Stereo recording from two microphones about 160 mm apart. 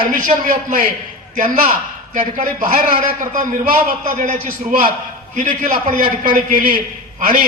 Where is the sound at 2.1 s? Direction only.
55° right (ahead or behind).